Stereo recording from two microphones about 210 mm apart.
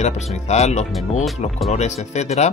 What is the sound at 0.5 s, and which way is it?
Speech, 30° left (ahead or behind).